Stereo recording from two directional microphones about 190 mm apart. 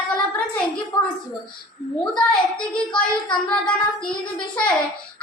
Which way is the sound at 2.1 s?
5° left (ahead or behind).